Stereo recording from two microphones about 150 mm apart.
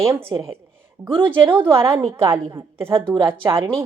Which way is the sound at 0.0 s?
15° right (ahead or behind).